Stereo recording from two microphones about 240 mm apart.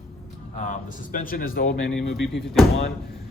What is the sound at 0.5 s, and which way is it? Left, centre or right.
A man's voice, left.